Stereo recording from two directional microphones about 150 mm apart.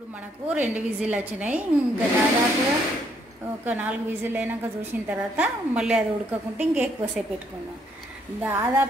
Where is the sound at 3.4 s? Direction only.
10° right (ahead or behind).